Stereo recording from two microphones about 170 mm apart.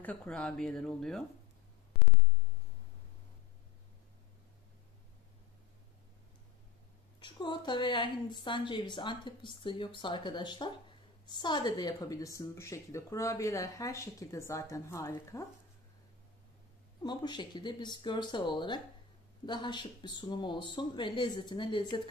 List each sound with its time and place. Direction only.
0.0 s speech: 5° left (ahead or behind)
7.2 s speech: 30° left (ahead or behind)
17.0 s speech: 25° left (ahead or behind)